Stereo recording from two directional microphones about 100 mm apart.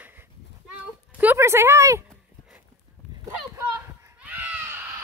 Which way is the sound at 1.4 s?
25° right (ahead or behind).